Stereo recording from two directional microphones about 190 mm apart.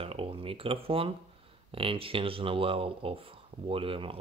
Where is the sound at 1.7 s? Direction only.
30° right (ahead or behind).